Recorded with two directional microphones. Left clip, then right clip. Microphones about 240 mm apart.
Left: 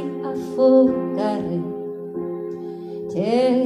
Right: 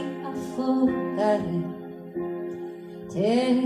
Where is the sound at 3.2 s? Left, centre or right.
Left.